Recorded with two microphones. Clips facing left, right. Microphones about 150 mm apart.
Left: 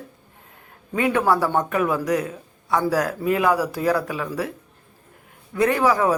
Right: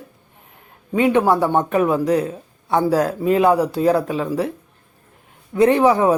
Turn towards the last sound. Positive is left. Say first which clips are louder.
# right 5 dB
turn(degrees=-25)  # may be behind; listen again after turning